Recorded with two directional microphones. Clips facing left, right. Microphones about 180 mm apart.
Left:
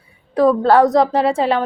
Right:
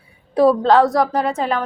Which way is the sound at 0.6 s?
15° left (ahead or behind).